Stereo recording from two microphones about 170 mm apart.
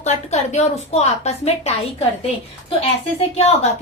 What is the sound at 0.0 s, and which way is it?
A woman's voice, 40° left (ahead or behind).